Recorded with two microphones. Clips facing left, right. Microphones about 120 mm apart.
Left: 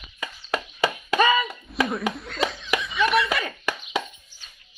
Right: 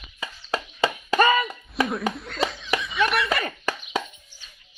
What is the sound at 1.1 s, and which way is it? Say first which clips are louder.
Speech: right 1 dB; 45° right (ahead or behind).